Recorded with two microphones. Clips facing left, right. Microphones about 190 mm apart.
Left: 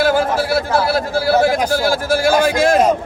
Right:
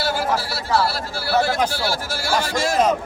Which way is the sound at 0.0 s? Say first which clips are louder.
Left 7 dB; 50° left (ahead or behind).